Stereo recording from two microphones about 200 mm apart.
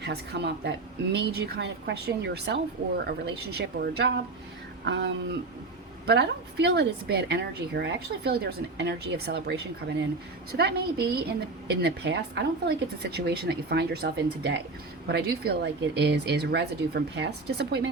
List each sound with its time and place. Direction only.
0.0 s a woman's voice: 60° right (ahead or behind)